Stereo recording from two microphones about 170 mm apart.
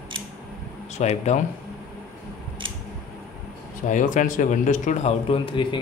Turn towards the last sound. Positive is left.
turn(degrees=30)  # may be behind; listen again after turning